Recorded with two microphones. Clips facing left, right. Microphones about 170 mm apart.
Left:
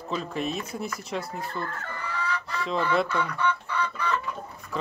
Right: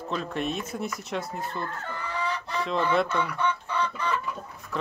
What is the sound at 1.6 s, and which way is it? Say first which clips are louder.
Chicken: even; 25° right (ahead or behind).